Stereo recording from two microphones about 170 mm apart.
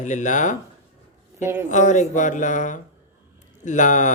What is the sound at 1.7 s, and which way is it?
A man's voice, 45° left (ahead or behind).